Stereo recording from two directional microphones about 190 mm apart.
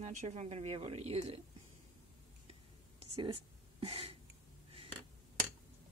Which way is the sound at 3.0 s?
30° right (ahead or behind).